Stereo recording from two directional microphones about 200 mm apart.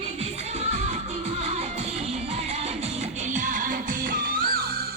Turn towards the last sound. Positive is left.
turn(degrees=-45)  # may be behind; listen again after turning